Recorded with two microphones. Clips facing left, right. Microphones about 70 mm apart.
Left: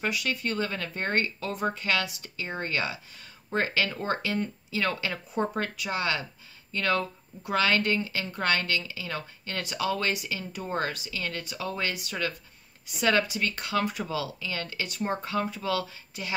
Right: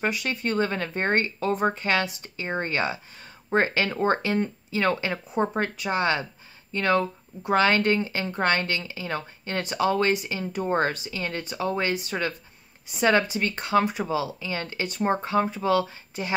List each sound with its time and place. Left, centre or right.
0.0 s speech: right